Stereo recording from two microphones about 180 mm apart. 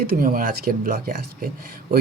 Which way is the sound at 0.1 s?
50° right (ahead or behind).